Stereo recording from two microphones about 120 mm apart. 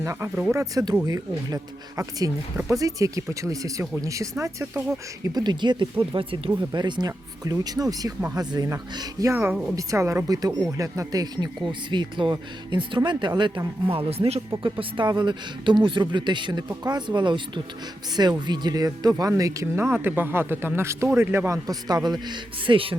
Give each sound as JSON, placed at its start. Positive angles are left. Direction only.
{"t": 0.0, "sound": "speech", "side_deg": -25}
{"t": 5.2, "sound": "speech", "side_deg": -35}
{"t": 6.6, "sound": "speech", "side_deg": -35}
{"t": 14.6, "sound": "speech", "side_deg": -45}